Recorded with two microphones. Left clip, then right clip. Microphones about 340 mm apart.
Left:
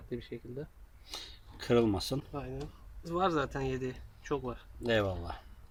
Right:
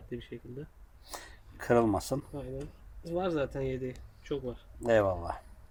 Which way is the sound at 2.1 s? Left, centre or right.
Right.